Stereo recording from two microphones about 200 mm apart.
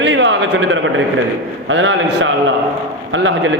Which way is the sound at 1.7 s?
65° right (ahead or behind).